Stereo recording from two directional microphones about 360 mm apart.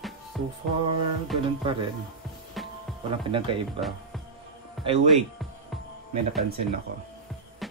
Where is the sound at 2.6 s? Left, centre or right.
Centre.